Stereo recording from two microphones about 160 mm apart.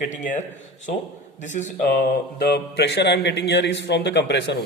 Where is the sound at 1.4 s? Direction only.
50° left (ahead or behind).